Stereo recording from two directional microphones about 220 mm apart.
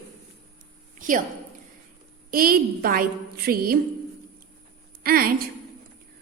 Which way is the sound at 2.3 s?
40° right (ahead or behind).